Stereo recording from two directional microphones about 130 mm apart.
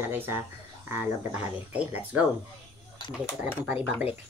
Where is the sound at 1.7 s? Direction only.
10° right (ahead or behind).